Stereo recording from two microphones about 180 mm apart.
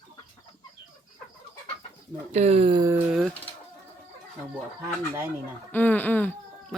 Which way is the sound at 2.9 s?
Centre (ahead or behind).